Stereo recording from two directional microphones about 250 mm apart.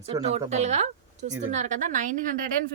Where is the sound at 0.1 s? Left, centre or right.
Right.